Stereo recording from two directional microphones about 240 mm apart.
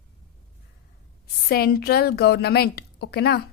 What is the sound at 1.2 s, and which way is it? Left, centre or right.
A woman's voice, left.